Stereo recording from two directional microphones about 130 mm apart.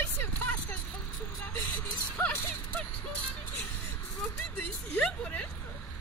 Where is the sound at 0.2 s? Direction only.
15° left (ahead or behind).